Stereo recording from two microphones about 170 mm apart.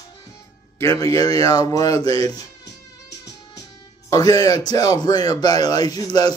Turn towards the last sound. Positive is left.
turn(degrees=25)  # may be behind; listen again after turning